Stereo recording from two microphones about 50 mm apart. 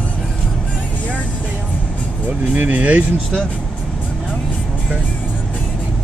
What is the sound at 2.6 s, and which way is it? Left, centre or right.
Speech, right.